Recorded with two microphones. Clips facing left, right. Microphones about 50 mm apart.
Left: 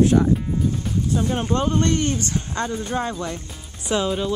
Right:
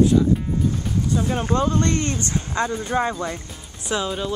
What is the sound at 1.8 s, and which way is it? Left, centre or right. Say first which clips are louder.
Music: left 1 dB; right.